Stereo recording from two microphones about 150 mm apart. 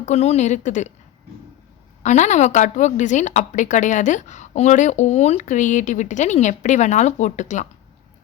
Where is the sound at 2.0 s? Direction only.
50° left (ahead or behind).